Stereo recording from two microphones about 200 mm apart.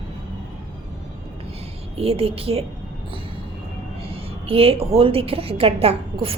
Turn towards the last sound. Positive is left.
turn(degrees=-30)  # may be behind; listen again after turning